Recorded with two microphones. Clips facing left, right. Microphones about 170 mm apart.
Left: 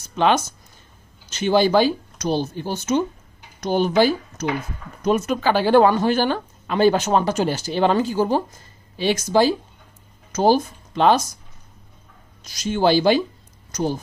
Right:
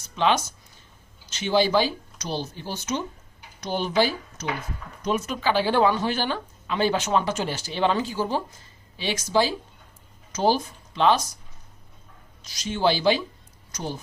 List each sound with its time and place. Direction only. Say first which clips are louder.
0.2 s speech: left 4 dB; 50° left (ahead or behind)
12.5 s speech: left 5 dB; 45° left (ahead or behind)